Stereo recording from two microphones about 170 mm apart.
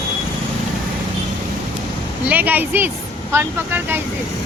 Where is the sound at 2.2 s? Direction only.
10° right (ahead or behind).